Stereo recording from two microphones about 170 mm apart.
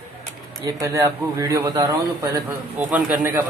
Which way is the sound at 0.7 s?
20° right (ahead or behind).